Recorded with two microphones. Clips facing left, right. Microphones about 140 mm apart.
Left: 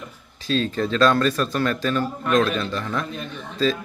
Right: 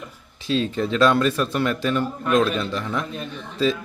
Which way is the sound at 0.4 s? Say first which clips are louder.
Even; 20° right (ahead or behind).